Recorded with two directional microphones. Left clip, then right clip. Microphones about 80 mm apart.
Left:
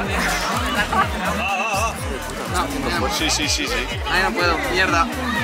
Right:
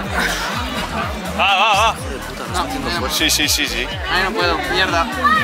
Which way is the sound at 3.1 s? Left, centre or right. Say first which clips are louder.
Right 4 dB; right.